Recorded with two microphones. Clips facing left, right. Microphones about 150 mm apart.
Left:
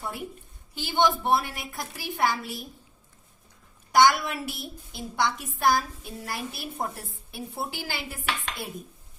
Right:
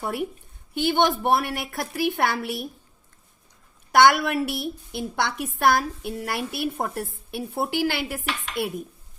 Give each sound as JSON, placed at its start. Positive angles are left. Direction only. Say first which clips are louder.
{"t": 0.0, "sound": "a woman's voice", "louder": "right 7 dB", "side_deg": -65}
{"t": 3.9, "sound": "a woman's voice", "louder": "right 3 dB", "side_deg": -60}